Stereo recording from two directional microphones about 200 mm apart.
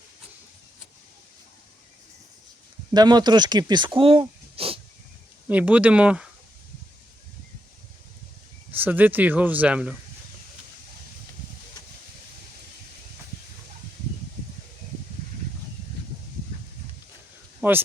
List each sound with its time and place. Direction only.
2.9 s speech: 20° right (ahead or behind)
5.5 s speech: 5° right (ahead or behind)
8.7 s speech: 10° right (ahead or behind)
17.6 s speech: 10° right (ahead or behind)